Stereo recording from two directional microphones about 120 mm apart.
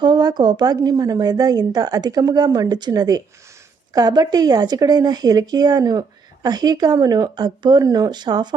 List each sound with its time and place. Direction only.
0.0 s speech: 35° right (ahead or behind)